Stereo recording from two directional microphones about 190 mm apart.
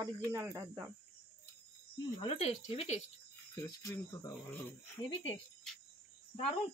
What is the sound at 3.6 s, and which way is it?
Speech, 15° left (ahead or behind).